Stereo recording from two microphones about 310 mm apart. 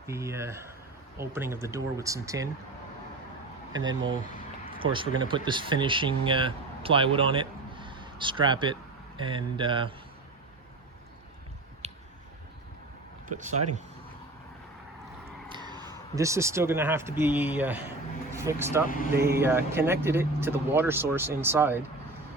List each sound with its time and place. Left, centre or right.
0.0 s speech: centre
3.7 s speech: centre
11.8 s a sound: right
13.2 s speech: right
15.4 s speech: centre
18.9 s speech: left
19.4 s speech: centre